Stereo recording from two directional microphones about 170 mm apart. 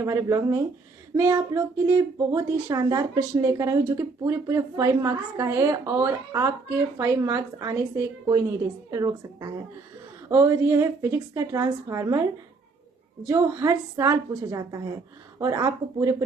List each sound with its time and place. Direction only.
0.0 s a woman's voice: 20° right (ahead or behind)
13.2 s a woman's voice: 15° right (ahead or behind)